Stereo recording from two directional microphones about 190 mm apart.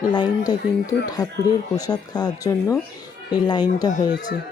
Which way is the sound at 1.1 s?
20° left (ahead or behind).